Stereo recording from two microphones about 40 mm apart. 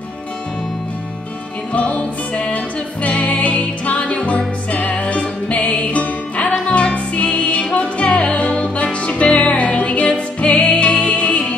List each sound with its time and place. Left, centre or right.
1.7 s music: left